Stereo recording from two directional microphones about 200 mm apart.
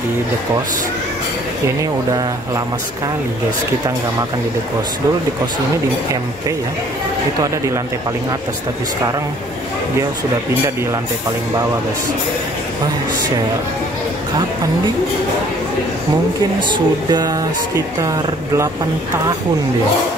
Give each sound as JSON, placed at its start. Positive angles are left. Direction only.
{"t": 16.7, "sound": "speech", "side_deg": -20}